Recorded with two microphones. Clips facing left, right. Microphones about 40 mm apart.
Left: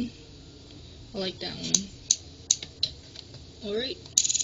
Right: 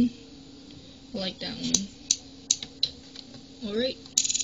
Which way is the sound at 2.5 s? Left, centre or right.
Right.